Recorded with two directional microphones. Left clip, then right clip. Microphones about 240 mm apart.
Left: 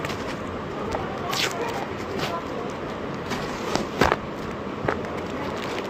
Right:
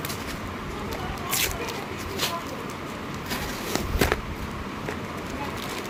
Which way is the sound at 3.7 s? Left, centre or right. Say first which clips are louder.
Left 4 dB; centre.